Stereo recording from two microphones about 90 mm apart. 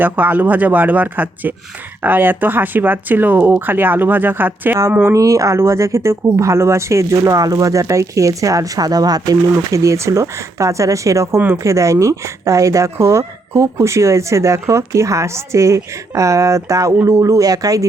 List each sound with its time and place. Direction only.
0.0 s speech: 20° right (ahead or behind)
5.1 s speech: 35° right (ahead or behind)
11.3 s speech: 25° right (ahead or behind)
11.6 s speech: 35° right (ahead or behind)